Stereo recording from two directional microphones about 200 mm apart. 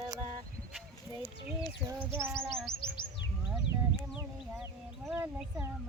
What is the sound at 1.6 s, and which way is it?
Child singing, 10° right (ahead or behind).